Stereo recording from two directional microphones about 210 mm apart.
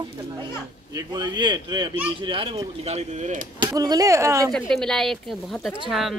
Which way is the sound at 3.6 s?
20° right (ahead or behind).